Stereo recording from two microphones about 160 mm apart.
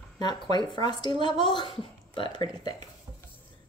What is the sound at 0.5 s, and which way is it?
Speech, 25° left (ahead or behind).